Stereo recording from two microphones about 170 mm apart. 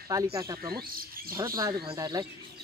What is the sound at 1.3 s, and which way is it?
Speech, 20° right (ahead or behind).